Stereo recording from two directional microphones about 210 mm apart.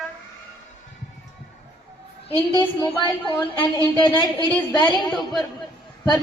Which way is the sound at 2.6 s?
15° left (ahead or behind).